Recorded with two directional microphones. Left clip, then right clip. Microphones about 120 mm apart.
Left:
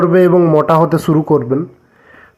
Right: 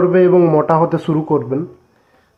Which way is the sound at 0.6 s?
25° left (ahead or behind).